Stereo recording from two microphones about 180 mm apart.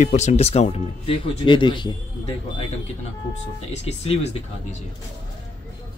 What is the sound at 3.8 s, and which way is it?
Speech, 35° left (ahead or behind).